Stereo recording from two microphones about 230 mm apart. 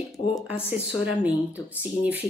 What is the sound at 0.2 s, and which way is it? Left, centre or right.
Speech, left.